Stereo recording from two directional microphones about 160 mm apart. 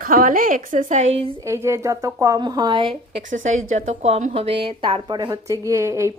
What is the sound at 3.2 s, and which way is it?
A woman's voice, 50° right (ahead or behind).